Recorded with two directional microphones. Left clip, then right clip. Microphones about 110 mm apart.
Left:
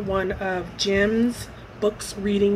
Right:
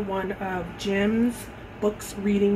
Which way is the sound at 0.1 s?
25° left (ahead or behind).